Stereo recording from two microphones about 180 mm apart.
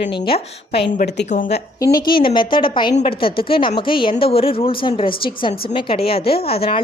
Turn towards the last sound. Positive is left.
turn(degrees=35)  # may be behind; listen again after turning